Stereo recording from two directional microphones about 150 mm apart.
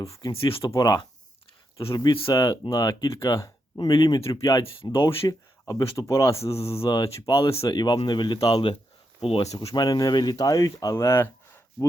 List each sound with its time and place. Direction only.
0.0 s speech: 20° left (ahead or behind)
0.3 s speech: 35° left (ahead or behind)
4.6 s speech: 35° left (ahead or behind)
5.2 s speech: 20° left (ahead or behind)
9.2 s speech: 40° left (ahead or behind)
9.7 s speech: 25° left (ahead or behind)